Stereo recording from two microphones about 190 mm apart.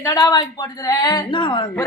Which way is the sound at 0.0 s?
20° left (ahead or behind).